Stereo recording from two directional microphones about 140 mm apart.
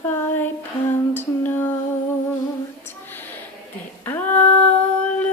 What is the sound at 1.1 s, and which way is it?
Female singing, 15° left (ahead or behind).